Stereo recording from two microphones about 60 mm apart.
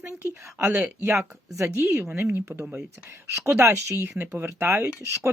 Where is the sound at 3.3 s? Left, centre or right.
Right.